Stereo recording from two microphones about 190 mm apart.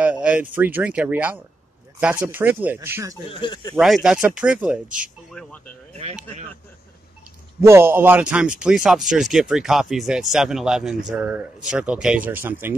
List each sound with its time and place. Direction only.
0.0 s a sound: 5° right (ahead or behind)
0.6 s speech: 10° right (ahead or behind)
3.3 s speech: 25° left (ahead or behind)
3.7 s a man's voice: centre (ahead or behind)
5.9 s speech: 35° right (ahead or behind)
7.6 s a man's voice: 15° right (ahead or behind)